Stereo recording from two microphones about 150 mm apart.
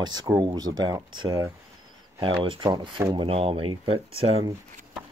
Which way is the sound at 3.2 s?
40° right (ahead or behind).